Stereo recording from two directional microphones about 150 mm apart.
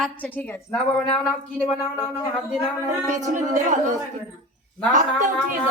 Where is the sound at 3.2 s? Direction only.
60° right (ahead or behind).